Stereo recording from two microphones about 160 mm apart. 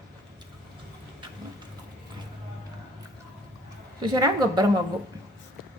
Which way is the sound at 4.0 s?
25° right (ahead or behind).